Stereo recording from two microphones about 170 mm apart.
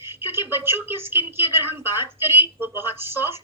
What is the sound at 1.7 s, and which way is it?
A woman's voice, 15° right (ahead or behind).